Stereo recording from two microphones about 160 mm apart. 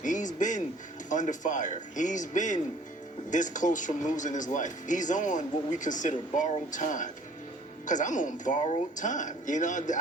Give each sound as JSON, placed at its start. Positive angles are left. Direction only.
{"t": 0.0, "sound": "music", "side_deg": 50}
{"t": 1.1, "sound": "speech", "side_deg": 50}